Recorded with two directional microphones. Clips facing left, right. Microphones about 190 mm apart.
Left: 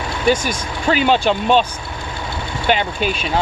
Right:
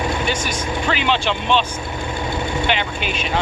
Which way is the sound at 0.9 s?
45° left (ahead or behind).